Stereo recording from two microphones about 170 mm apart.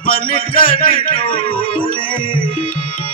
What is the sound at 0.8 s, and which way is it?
Speech, 30° left (ahead or behind).